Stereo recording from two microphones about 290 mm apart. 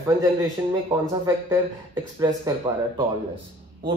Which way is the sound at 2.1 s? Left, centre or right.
Centre.